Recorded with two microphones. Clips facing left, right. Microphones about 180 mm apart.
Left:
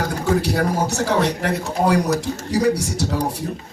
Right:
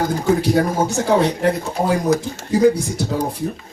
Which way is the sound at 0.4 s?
75° left (ahead or behind).